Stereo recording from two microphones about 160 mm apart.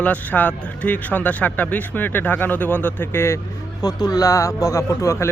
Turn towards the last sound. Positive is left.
turn(degrees=20)  # may be behind; listen again after turning